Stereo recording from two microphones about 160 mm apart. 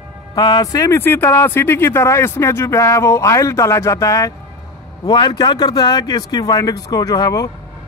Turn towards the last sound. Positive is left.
turn(degrees=25)  # may be behind; listen again after turning